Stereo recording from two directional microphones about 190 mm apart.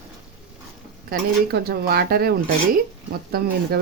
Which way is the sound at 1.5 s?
55° right (ahead or behind).